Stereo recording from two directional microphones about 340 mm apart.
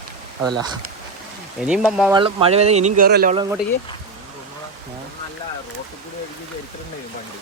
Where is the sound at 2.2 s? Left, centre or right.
Centre.